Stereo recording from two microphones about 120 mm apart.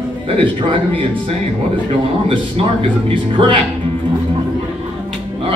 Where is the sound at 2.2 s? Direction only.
50° right (ahead or behind).